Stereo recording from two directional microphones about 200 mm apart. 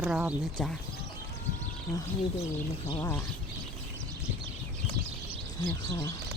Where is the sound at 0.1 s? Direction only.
5° right (ahead or behind).